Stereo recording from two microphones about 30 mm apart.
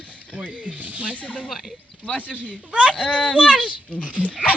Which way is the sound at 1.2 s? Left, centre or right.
Left.